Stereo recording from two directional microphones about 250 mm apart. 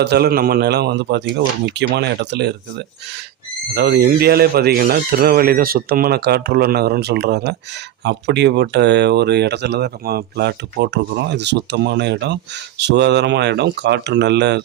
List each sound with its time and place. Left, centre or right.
0.0 s speech: right